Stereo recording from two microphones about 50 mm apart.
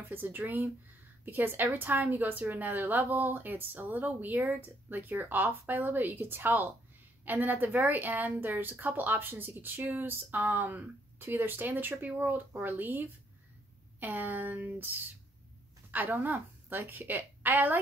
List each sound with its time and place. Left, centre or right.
0.1 s a woman's voice: right
15.9 s a woman's voice: right